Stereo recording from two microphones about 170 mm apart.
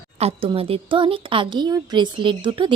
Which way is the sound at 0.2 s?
35° right (ahead or behind).